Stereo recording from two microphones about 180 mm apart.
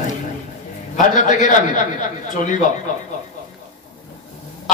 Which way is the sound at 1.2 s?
45° left (ahead or behind).